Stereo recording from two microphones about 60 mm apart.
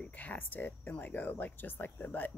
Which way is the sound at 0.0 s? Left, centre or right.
Left.